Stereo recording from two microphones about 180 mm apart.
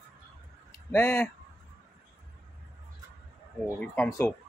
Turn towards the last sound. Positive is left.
turn(degrees=10)  # may be behind; listen again after turning